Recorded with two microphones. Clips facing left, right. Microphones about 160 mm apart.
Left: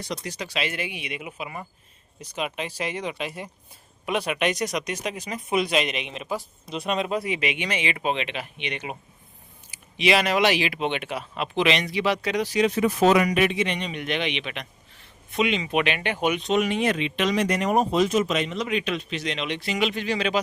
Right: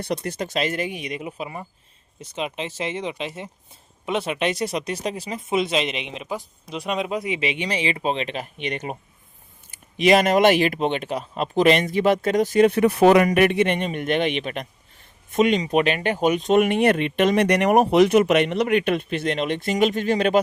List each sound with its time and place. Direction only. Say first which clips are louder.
0.0 s speech: right 6 dB; 55° right (ahead or behind)